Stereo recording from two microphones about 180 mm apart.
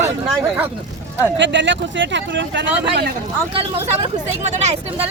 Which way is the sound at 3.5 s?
30° right (ahead or behind).